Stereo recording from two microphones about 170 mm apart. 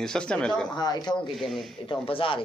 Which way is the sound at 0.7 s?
25° left (ahead or behind).